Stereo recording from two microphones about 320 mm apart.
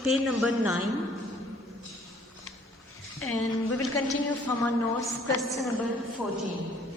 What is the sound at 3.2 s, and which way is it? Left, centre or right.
Speech, left.